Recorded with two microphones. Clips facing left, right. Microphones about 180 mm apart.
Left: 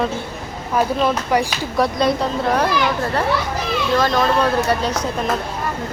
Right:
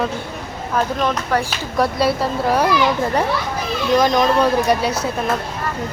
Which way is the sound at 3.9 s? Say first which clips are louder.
Right 3 dB; 15° right (ahead or behind).